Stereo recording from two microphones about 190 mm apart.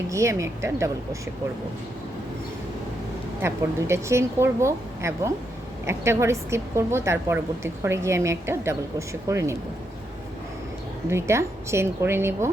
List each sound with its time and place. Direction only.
0.1 s a woman's voice: 15° right (ahead or behind)
3.4 s a woman's voice: 15° right (ahead or behind)
11.1 s a woman's voice: 15° right (ahead or behind)